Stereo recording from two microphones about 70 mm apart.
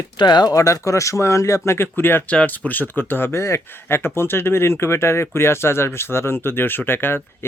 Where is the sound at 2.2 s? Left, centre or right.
Left.